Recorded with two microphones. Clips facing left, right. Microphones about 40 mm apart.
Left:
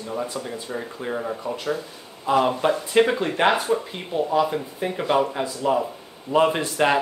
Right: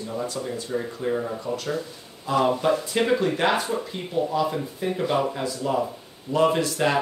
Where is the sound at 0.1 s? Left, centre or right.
Left.